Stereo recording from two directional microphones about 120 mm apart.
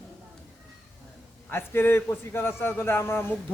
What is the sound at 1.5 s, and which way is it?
A man's voice, 20° left (ahead or behind).